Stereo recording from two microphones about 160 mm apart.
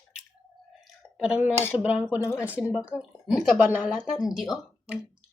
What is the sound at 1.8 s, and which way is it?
Speech, 5° right (ahead or behind).